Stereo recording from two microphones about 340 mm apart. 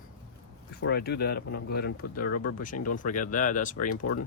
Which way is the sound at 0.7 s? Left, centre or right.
Left.